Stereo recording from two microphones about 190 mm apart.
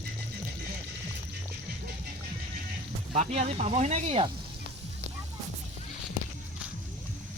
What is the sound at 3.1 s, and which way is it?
Speech, 40° right (ahead or behind).